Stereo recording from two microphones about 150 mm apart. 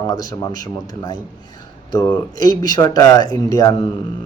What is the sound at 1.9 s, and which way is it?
Speech, 25° left (ahead or behind).